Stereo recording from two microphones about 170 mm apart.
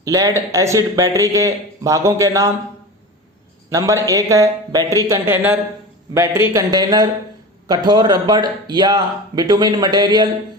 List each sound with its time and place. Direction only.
0.0 s speech: 20° right (ahead or behind)
3.7 s speech: 20° right (ahead or behind)
4.8 s speech: 20° left (ahead or behind)
5.0 s speech: 15° right (ahead or behind)